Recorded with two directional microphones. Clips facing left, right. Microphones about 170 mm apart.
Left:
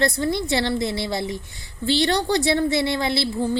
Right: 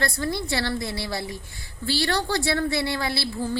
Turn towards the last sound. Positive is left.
turn(degrees=20)  # may be behind; listen again after turning